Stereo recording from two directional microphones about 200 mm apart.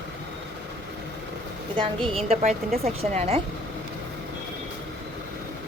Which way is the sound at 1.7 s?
25° right (ahead or behind).